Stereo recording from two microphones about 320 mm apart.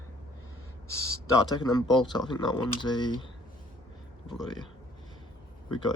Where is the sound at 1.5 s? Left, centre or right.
Centre.